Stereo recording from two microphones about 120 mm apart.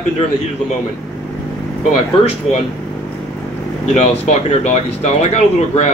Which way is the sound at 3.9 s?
65° left (ahead or behind).